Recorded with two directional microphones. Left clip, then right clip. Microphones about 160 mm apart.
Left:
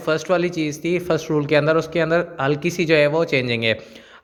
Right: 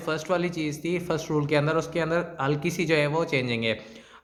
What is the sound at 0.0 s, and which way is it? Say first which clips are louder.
A man's voice: left 7 dB; 30° left (ahead or behind).